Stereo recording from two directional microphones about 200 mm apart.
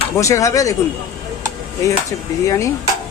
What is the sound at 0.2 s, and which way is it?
Speech, 15° left (ahead or behind).